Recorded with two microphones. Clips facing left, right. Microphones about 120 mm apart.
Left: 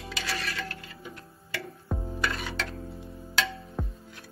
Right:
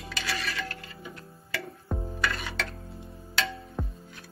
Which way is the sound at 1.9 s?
5° left (ahead or behind).